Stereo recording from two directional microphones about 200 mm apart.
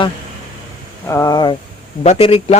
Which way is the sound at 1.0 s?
15° left (ahead or behind).